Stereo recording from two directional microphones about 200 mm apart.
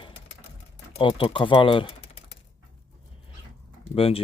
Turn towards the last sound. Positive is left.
turn(degrees=30)  # may be behind; listen again after turning